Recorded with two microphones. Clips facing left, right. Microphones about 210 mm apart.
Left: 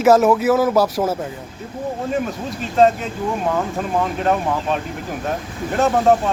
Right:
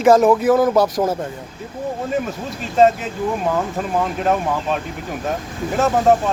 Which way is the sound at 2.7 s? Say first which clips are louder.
Right 1 dB; centre (ahead or behind).